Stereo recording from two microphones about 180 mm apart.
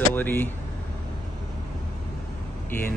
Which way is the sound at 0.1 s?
10° left (ahead or behind).